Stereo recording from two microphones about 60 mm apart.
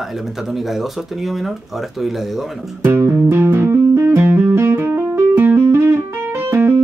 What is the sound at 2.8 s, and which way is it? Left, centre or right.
Music, right.